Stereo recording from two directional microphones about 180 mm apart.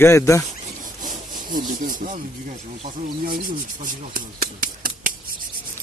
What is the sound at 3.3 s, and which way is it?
Speech, 50° right (ahead or behind).